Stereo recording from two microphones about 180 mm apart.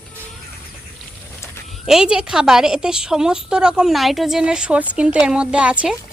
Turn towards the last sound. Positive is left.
turn(degrees=-5)  # may be behind; listen again after turning